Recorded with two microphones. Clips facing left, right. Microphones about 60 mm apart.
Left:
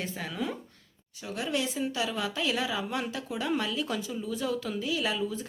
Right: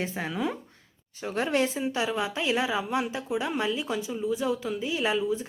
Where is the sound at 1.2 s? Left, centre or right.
Right.